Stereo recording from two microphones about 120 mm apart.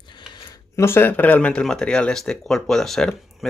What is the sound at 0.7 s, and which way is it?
Speech, 20° left (ahead or behind).